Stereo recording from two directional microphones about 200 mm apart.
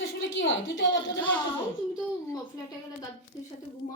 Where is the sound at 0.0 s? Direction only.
70° left (ahead or behind).